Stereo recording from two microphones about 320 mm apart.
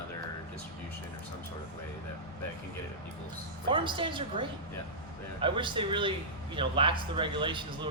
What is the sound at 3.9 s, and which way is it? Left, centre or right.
Speech, centre.